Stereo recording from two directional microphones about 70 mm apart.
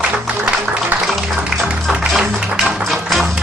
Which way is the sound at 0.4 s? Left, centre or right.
Centre.